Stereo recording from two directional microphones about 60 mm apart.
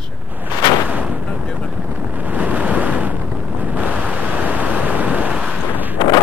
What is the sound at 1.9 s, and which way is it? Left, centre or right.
Waves, right.